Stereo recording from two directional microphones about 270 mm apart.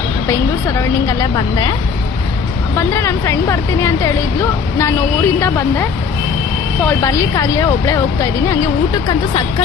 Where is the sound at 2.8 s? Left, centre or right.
Centre.